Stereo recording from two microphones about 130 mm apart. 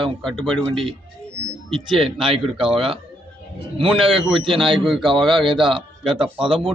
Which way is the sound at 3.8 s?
40° right (ahead or behind).